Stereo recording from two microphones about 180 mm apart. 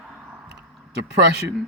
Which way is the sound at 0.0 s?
5° right (ahead or behind).